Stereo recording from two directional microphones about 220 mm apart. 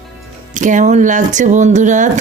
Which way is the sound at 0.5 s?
35° right (ahead or behind).